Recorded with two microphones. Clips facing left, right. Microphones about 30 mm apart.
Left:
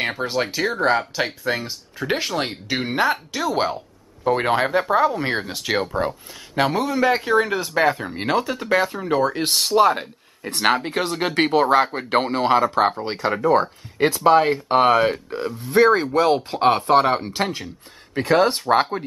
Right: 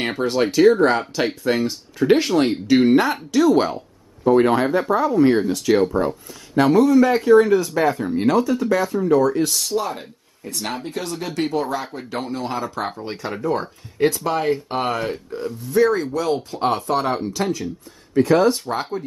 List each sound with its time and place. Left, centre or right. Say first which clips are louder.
0.3 s speech: right 8 dB; centre
4.2 s speech: right 3 dB; left
15.0 s speech: left 3 dB; left